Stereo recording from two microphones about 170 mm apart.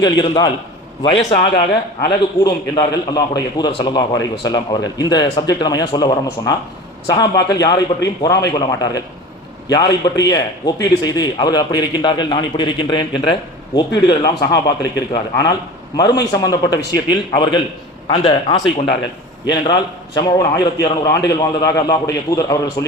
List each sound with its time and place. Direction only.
0.0 s a man's voice: 25° left (ahead or behind)
1.0 s a man's voice: 35° left (ahead or behind)
2.0 s a man's voice: 25° left (ahead or behind)